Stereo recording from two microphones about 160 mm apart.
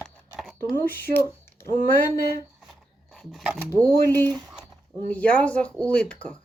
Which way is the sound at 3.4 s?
10° right (ahead or behind).